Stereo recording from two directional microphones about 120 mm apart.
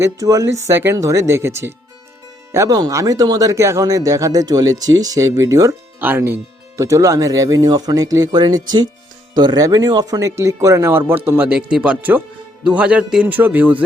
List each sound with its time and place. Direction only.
0.0 s speech: 30° right (ahead or behind)